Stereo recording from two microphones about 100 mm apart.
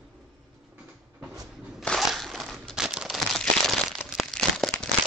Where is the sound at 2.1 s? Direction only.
Centre (ahead or behind).